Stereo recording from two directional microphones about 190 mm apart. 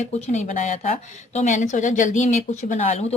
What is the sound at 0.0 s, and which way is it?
A woman's voice, 35° left (ahead or behind).